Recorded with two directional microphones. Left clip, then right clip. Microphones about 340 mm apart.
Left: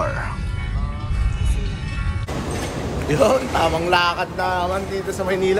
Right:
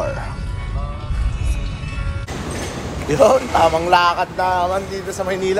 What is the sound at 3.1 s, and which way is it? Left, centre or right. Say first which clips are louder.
Speech: right 4 dB; centre.